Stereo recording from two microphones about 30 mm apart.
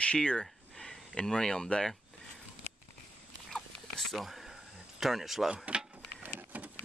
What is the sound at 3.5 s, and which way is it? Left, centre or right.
Dog, centre.